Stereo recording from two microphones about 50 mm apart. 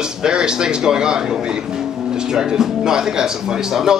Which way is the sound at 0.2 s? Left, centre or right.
Centre.